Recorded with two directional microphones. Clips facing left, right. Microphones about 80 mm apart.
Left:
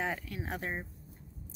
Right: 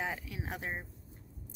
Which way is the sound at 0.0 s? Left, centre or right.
Centre.